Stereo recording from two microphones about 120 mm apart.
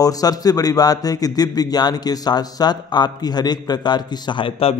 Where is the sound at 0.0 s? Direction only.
30° left (ahead or behind).